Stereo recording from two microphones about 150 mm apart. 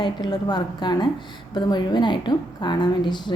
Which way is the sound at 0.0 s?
30° left (ahead or behind).